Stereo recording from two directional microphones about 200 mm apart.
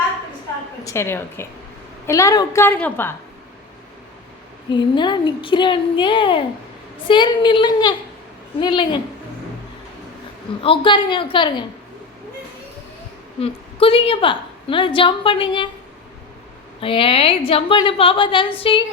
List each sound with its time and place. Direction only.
0.9 s a woman's voice: 10° left (ahead or behind)
4.7 s a woman's voice: 20° left (ahead or behind)
10.6 s a woman's voice: 25° left (ahead or behind)
13.4 s a woman's voice: 30° left (ahead or behind)
16.8 s a woman's voice: 25° left (ahead or behind)